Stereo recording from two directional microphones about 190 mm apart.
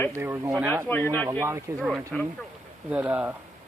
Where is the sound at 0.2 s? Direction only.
10° right (ahead or behind).